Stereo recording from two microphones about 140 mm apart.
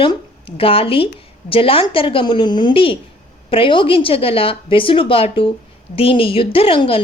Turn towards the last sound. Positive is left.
turn(degrees=40)  # may be behind; listen again after turning